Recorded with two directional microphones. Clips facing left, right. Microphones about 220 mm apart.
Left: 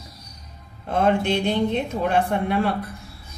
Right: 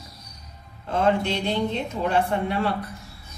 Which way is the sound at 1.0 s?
55° left (ahead or behind).